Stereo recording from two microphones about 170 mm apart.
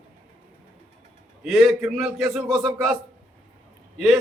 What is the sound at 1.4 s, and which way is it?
A man's voice, centre (ahead or behind).